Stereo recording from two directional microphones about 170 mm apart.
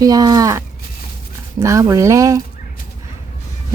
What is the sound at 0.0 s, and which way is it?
Speech, 20° right (ahead or behind).